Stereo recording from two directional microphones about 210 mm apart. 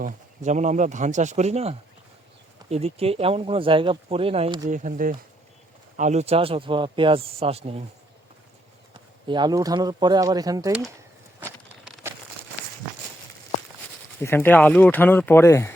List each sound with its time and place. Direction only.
0.0 s speech: 35° right (ahead or behind)
4.7 s speech: 40° right (ahead or behind)
8.9 s speech: 20° right (ahead or behind)
10.7 s speech: centre (ahead or behind)
11.3 s a sound: 5° right (ahead or behind)
14.2 s speech: 10° left (ahead or behind)